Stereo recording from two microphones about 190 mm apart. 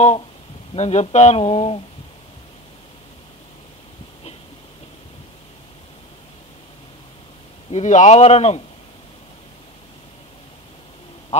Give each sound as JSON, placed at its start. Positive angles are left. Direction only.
{"t": 0.7, "sound": "speech", "side_deg": 35}
{"t": 7.7, "sound": "speech", "side_deg": 40}